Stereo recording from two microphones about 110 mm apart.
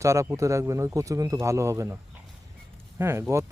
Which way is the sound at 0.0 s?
25° right (ahead or behind).